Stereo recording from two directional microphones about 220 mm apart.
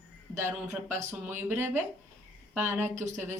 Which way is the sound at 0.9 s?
35° right (ahead or behind).